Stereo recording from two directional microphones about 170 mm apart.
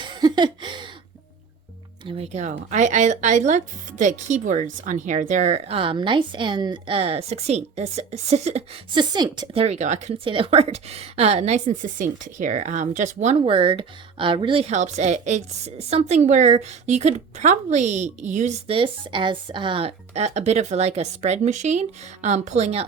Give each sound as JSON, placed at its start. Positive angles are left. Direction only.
{"t": 0.0, "sound": "a sound", "side_deg": -25}
{"t": 2.0, "sound": "a woman's voice", "side_deg": -35}
{"t": 9.6, "sound": "a woman's voice", "side_deg": -45}